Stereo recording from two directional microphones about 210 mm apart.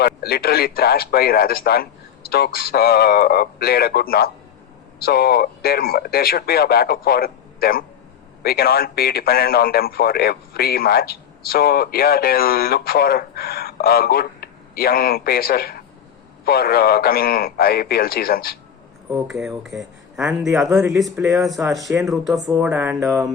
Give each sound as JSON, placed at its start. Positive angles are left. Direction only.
{"t": 0.0, "sound": "a man's voice", "side_deg": 45}
{"t": 19.0, "sound": "speech", "side_deg": -5}
{"t": 21.2, "sound": "music", "side_deg": -15}
{"t": 21.4, "sound": "speech", "side_deg": 0}
{"t": 22.4, "sound": "music", "side_deg": -10}